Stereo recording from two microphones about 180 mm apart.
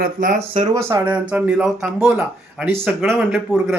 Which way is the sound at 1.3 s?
5° right (ahead or behind).